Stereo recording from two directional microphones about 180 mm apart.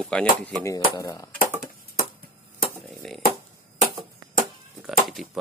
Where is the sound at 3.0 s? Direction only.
Centre (ahead or behind).